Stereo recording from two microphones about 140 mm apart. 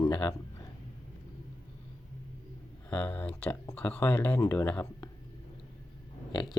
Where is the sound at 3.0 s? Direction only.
10° left (ahead or behind).